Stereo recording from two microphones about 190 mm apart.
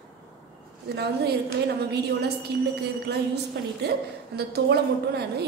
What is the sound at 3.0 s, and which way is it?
A woman's voice, 60° right (ahead or behind).